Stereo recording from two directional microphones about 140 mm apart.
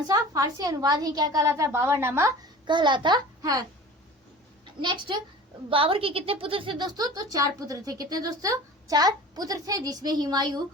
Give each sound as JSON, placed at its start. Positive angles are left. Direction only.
{"t": 0.1, "sound": "speech", "side_deg": -25}
{"t": 2.6, "sound": "a woman's voice", "side_deg": -35}
{"t": 4.8, "sound": "a woman's voice", "side_deg": -35}